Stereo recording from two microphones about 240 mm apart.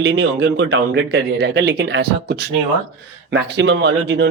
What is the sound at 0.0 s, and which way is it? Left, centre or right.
Speech, right.